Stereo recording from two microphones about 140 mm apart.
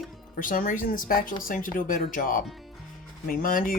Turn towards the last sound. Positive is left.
turn(degrees=85)